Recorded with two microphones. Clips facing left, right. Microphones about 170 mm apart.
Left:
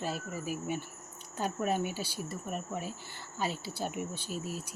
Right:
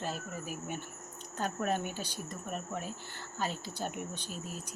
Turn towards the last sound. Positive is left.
turn(degrees=5)  # may be behind; listen again after turning